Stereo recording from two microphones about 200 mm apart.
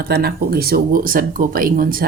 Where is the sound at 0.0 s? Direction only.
50° right (ahead or behind).